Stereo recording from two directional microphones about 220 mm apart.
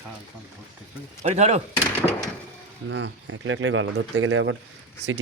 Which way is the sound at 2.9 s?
60° right (ahead or behind).